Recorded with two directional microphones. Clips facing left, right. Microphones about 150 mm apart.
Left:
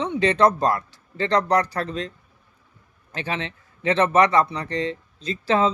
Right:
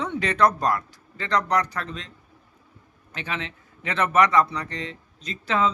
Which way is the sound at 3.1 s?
35° left (ahead or behind).